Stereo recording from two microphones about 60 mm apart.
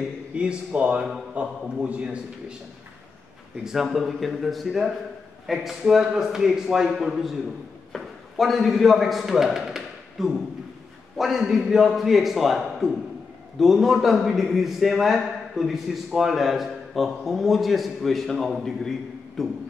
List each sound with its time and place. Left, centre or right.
0.3 s a man's voice: centre
3.6 s a man's voice: centre